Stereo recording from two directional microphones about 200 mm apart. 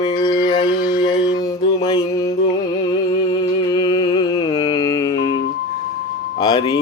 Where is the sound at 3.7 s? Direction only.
20° left (ahead or behind).